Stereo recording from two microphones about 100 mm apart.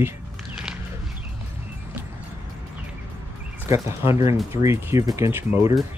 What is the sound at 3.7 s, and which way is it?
Speech, 30° right (ahead or behind).